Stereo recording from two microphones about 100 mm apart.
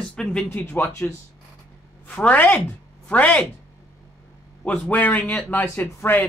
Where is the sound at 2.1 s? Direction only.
15° left (ahead or behind).